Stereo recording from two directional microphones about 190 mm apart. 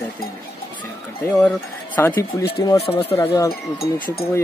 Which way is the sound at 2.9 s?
30° left (ahead or behind).